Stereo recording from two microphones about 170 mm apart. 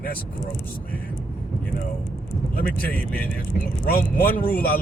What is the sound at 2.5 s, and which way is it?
Speech, 60° left (ahead or behind).